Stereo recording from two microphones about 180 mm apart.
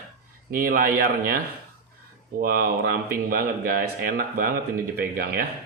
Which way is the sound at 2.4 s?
55° right (ahead or behind).